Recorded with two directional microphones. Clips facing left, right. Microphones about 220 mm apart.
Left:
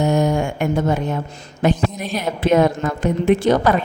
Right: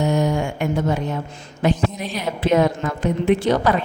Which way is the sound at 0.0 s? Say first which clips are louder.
Left 2 dB; 50° left (ahead or behind).